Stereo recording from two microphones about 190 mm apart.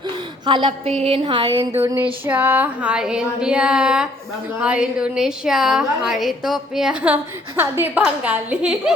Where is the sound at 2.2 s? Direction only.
10° right (ahead or behind).